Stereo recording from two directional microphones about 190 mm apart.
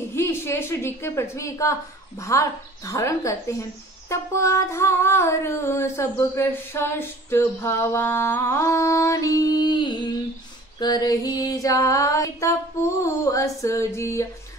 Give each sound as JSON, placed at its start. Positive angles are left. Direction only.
{"t": 0.1, "sound": "female singing", "side_deg": 15}